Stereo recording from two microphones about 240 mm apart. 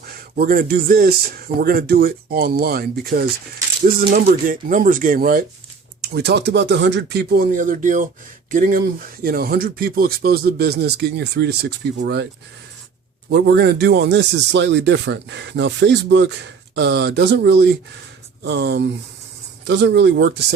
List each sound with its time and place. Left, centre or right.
0.0 s speech: right
13.3 s speech: right